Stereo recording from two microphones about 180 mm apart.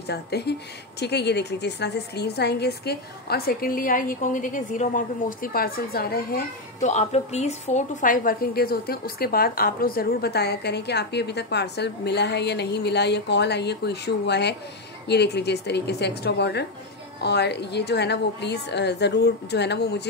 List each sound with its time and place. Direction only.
0.0 s a woman's voice: 65° left (ahead or behind)
6.8 s a woman's voice: 40° left (ahead or behind); by 20.0 s 70° left (ahead or behind)